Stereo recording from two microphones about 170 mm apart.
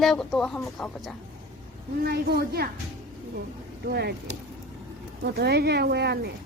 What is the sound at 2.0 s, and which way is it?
Speech, 65° right (ahead or behind).